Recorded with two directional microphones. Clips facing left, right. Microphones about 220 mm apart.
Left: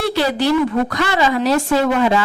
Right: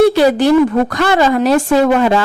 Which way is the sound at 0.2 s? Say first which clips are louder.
Right 6 dB; 50° right (ahead or behind).